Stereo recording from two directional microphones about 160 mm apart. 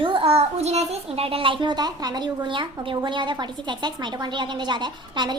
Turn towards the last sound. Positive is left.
turn(degrees=-25)  # may be behind; listen again after turning